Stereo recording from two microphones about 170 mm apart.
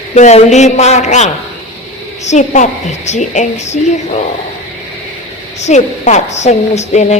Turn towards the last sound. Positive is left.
turn(degrees=40)  # may be behind; listen again after turning